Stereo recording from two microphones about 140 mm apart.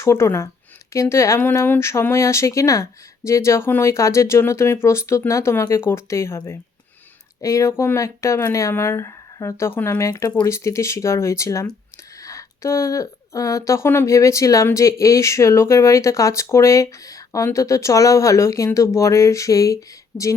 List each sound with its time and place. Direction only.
0.0 s speech: 20° left (ahead or behind)